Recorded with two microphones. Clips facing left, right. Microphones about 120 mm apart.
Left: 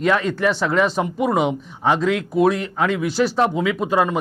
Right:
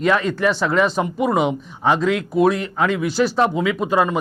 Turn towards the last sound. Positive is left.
turn(degrees=-20)  # may be behind; listen again after turning